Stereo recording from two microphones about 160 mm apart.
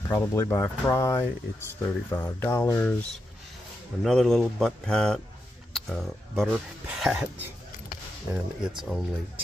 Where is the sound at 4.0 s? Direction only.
Centre (ahead or behind).